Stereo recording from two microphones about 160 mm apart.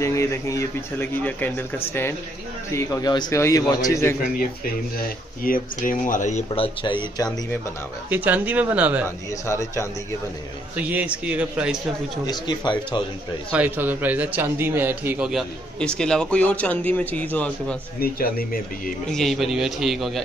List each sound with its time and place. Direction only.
0.0 s speech: 20° left (ahead or behind)
2.7 s a man's voice: 20° left (ahead or behind)
4.9 s speech: 60° left (ahead or behind); by 7.2 s 30° left (ahead or behind)
8.1 s a man's voice: 10° right (ahead or behind)
9.5 s speech: 15° left (ahead or behind)
10.8 s a man's voice: 10° right (ahead or behind)
12.3 s a man's voice: 30° left (ahead or behind)
13.5 s a man's voice: 10° right (ahead or behind)
15.8 s speech: 5° left (ahead or behind)
18.0 s speech: 65° left (ahead or behind)
19.0 s a man's voice: centre (ahead or behind)